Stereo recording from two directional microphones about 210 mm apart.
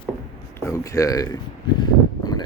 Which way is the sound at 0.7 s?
15° left (ahead or behind).